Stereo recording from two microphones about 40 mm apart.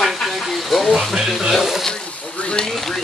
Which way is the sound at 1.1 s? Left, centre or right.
Centre.